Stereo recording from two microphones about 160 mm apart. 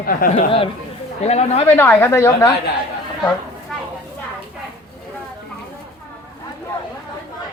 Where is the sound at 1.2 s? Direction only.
40° left (ahead or behind).